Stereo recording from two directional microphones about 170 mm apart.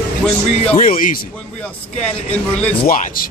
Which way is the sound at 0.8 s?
55° left (ahead or behind).